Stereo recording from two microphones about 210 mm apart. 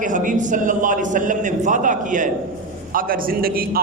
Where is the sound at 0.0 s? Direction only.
40° right (ahead or behind).